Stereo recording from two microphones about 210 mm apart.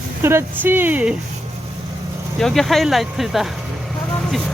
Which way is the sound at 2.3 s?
Centre (ahead or behind).